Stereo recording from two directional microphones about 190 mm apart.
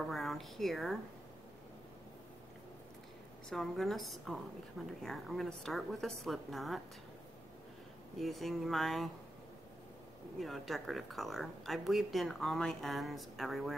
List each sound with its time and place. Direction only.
0.0 s speech: centre (ahead or behind)
3.4 s speech: centre (ahead or behind)
8.2 s speech: centre (ahead or behind)
10.4 s speech: centre (ahead or behind)